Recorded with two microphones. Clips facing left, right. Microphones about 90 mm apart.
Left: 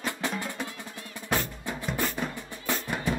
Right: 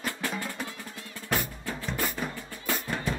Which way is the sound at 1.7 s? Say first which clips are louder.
Left 1 dB; 15° left (ahead or behind).